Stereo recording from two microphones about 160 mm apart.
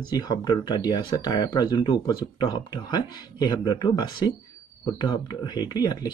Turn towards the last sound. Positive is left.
turn(degrees=25)  # may be behind; listen again after turning